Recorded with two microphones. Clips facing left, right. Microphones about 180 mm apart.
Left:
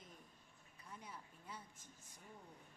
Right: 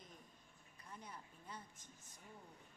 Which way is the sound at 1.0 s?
5° left (ahead or behind).